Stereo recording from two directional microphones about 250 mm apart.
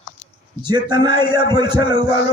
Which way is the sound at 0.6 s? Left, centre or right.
Centre.